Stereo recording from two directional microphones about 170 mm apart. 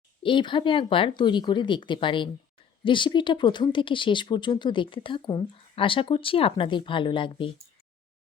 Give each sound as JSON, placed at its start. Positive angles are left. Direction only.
{"t": 0.2, "sound": "speech", "side_deg": 30}